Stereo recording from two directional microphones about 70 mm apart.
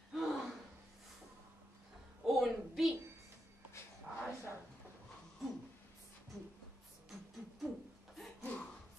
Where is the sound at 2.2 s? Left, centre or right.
Centre.